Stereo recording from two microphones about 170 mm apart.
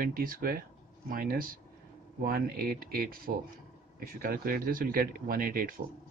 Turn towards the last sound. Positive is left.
turn(degrees=-55)  # may be behind; listen again after turning